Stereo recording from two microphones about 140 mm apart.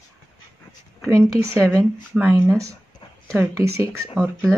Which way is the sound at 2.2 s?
15° right (ahead or behind).